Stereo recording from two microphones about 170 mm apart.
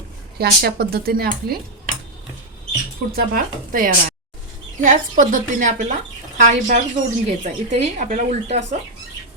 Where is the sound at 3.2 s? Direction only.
55° right (ahead or behind).